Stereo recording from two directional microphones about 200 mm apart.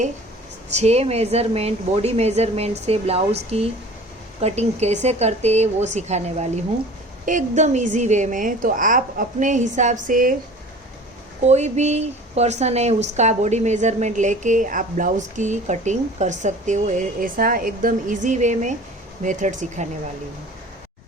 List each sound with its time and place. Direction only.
0.7 s a woman's voice: 35° right (ahead or behind)
11.4 s a woman's voice: 35° right (ahead or behind)